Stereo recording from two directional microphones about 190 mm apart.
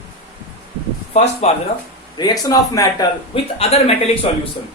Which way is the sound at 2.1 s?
20° left (ahead or behind).